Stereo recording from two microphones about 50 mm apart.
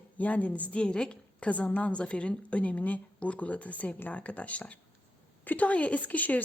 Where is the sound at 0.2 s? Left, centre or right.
Left.